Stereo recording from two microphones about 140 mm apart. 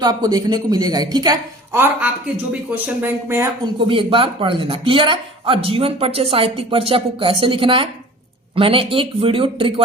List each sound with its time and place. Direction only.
0.0 s a woman's voice: 30° right (ahead or behind)
1.8 s speech: 10° right (ahead or behind)
3.8 s speech: 40° right (ahead or behind)